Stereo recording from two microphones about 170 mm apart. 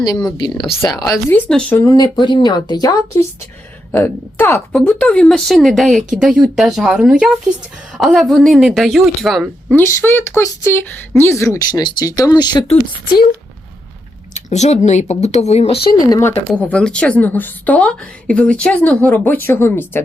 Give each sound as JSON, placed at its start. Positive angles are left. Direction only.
{"t": 0.3, "sound": "a woman's voice", "side_deg": 25}
{"t": 1.5, "sound": "a woman's voice", "side_deg": 5}
{"t": 1.8, "sound": "a woman's voice", "side_deg": 20}
{"t": 9.8, "sound": "a woman's voice", "side_deg": 15}
{"t": 14.3, "sound": "speech", "side_deg": 40}
{"t": 16.0, "sound": "speech", "side_deg": 20}
{"t": 16.6, "sound": "a woman's voice", "side_deg": 5}